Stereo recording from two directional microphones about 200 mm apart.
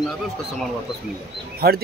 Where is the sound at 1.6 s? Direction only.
50° right (ahead or behind).